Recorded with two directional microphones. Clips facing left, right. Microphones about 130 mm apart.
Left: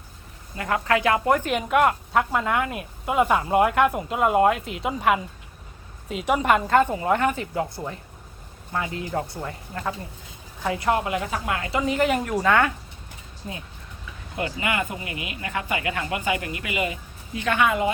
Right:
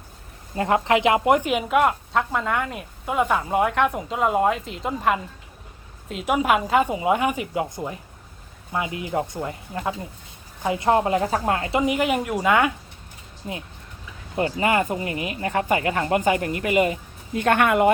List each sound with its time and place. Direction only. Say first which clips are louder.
0.5 s a woman's voice: right 4 dB; 25° right (ahead or behind)
1.5 s a woman's voice: right 1 dB; 5° right (ahead or behind)
14.3 s speech: right 5 dB; 35° right (ahead or behind); by 17.9 s 60° right (ahead or behind)